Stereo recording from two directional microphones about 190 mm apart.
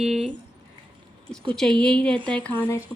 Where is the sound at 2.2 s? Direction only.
25° right (ahead or behind).